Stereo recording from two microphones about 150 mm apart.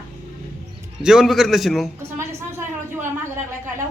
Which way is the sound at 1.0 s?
5° right (ahead or behind).